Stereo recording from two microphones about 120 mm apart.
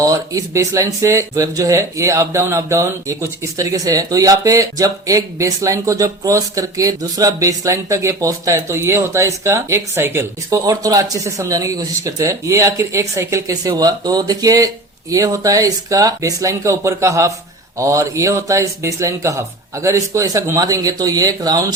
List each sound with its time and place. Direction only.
0.0 s speech: 30° right (ahead or behind)